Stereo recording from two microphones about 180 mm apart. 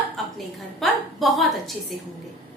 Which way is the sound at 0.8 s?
Centre (ahead or behind).